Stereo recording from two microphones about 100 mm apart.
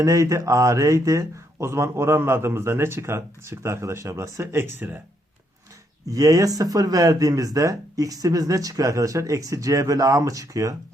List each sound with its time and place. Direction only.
0.0 s speech: 35° right (ahead or behind)
6.1 s speech: 35° right (ahead or behind)